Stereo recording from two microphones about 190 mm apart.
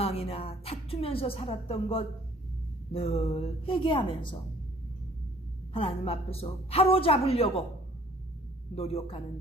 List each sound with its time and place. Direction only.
0.0 s a woman's voice: 30° left (ahead or behind)
5.7 s a woman's voice: 30° left (ahead or behind)
8.7 s a woman's voice: 30° left (ahead or behind)